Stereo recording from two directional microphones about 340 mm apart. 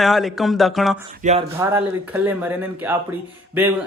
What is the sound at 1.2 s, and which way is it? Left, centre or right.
Speech, right.